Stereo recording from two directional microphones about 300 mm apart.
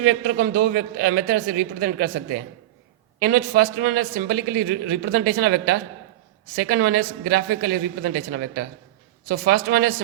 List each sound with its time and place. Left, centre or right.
0.0 s a man's voice: right
3.2 s a man's voice: right